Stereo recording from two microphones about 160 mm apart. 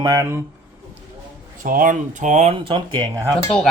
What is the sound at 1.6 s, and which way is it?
Speech, 60° right (ahead or behind).